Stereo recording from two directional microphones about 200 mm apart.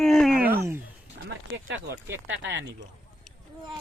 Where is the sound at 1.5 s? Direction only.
70° right (ahead or behind).